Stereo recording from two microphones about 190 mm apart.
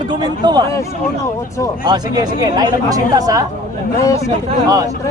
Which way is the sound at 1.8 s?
20° right (ahead or behind).